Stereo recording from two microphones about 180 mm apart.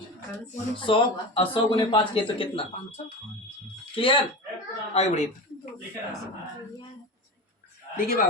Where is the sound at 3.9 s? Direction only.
30° left (ahead or behind).